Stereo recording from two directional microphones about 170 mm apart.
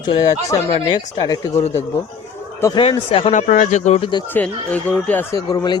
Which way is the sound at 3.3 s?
50° left (ahead or behind).